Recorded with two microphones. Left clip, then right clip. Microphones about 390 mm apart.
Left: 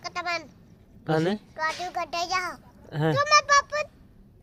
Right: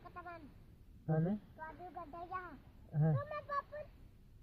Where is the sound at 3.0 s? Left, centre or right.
Left.